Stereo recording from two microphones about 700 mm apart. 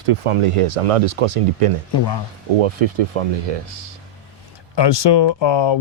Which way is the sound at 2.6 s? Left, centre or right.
Right.